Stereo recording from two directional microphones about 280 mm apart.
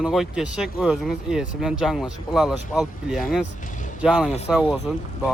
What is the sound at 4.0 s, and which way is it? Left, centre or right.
Speech, centre.